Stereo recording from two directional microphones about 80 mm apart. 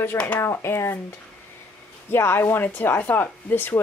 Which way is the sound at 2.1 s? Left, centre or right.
Left.